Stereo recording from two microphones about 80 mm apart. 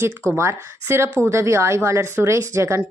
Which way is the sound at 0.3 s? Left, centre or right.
Right.